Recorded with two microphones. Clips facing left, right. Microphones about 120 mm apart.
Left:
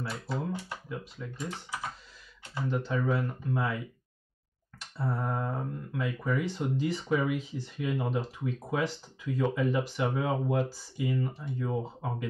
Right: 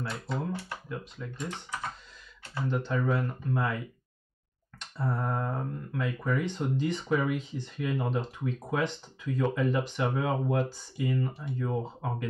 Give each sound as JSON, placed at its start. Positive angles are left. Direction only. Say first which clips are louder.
{"t": 0.0, "sound": "speech", "louder": "right 1 dB", "side_deg": 5}
{"t": 0.5, "sound": "speech", "louder": "even", "side_deg": 20}
{"t": 0.8, "sound": "speech", "louder": "right 1 dB", "side_deg": 5}